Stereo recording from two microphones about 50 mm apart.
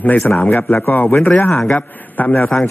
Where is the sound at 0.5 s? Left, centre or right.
Left.